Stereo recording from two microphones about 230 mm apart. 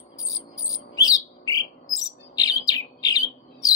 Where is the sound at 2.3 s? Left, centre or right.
Centre.